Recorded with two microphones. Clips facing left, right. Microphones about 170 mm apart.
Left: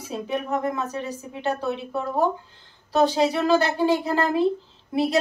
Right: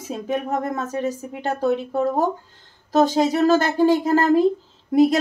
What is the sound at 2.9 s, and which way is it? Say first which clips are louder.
Speech: right 2 dB; 45° right (ahead or behind).